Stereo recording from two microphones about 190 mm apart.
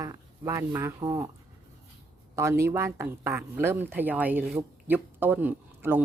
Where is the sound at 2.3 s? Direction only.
15° right (ahead or behind).